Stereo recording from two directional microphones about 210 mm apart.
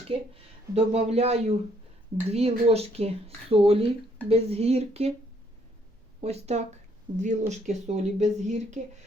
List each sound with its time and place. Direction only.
0.1 s speech: 25° right (ahead or behind)
6.2 s speech: 30° right (ahead or behind)